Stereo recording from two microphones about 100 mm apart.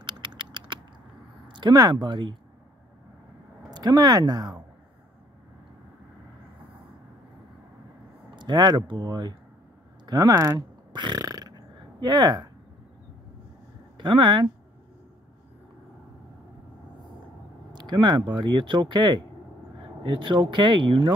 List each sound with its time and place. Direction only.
0.0 s typing: 50° right (ahead or behind)
1.5 s speech: 45° right (ahead or behind)
3.7 s speech: 40° right (ahead or behind)
8.4 s speech: 45° right (ahead or behind)
10.0 s burping: 40° right (ahead or behind)
13.9 s speech: 50° right (ahead or behind)
17.7 s speech: 45° right (ahead or behind)